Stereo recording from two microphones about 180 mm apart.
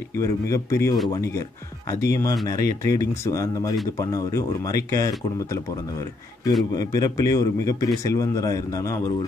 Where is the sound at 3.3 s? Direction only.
15° left (ahead or behind).